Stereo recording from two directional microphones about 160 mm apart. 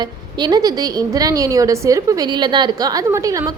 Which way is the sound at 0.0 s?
25° right (ahead or behind).